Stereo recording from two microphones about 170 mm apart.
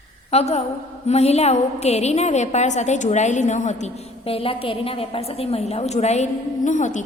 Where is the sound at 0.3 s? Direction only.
40° left (ahead or behind).